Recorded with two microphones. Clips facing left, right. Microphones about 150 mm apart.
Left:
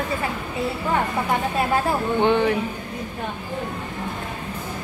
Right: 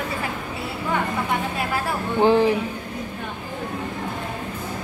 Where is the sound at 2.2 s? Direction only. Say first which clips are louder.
Right 4 dB; 35° right (ahead or behind).